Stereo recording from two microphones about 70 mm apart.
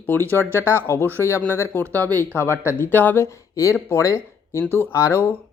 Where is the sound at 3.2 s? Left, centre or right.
Left.